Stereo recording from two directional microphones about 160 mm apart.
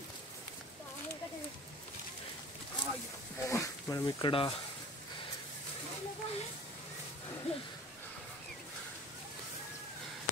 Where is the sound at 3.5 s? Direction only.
20° left (ahead or behind).